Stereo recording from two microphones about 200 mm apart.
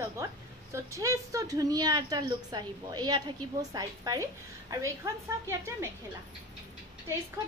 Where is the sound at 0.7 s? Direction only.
15° right (ahead or behind).